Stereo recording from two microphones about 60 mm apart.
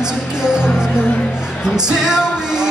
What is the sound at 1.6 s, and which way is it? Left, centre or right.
Music, centre.